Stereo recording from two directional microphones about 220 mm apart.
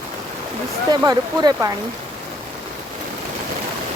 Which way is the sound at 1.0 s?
20° right (ahead or behind).